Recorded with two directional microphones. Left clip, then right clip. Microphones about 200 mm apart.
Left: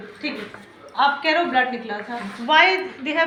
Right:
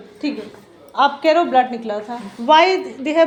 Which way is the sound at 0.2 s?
65° right (ahead or behind).